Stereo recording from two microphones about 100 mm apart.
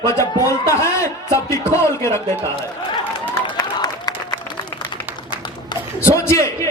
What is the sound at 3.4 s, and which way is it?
Applause, 40° left (ahead or behind).